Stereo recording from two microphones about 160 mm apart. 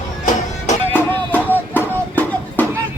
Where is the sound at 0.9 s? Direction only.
10° left (ahead or behind).